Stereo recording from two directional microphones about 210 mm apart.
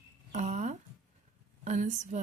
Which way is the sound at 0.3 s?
35° right (ahead or behind).